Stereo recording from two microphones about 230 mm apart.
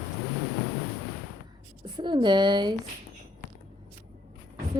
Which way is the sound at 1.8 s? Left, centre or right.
Centre.